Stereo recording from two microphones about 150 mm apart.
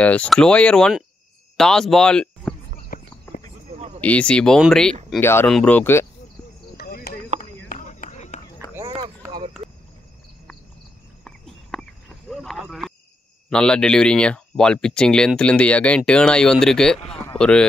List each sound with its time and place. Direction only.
0.0 s speech: 10° left (ahead or behind)
2.9 s clip-clop: 70° left (ahead or behind)
4.0 s speech: 10° left (ahead or behind)
5.2 s speech: 15° left (ahead or behind)
6.8 s chop: 90° left
7.3 s a sound: 65° left (ahead or behind)
8.8 s run: 35° right (ahead or behind)
11.7 s a sound: 5° left (ahead or behind)
13.5 s speech: 5° left (ahead or behind)